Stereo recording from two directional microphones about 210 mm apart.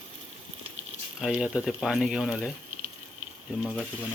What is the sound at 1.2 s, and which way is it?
Speech, 5° right (ahead or behind).